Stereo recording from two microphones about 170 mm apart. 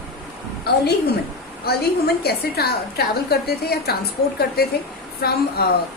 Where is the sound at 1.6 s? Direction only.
65° left (ahead or behind).